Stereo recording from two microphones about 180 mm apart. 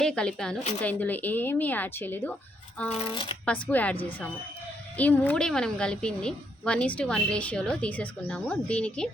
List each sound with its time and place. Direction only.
0.0 s a woman's voice: 5° left (ahead or behind)
2.9 s speech: 30° left (ahead or behind)
3.4 s speech: 10° left (ahead or behind)
4.9 s a woman's voice: 10° left (ahead or behind)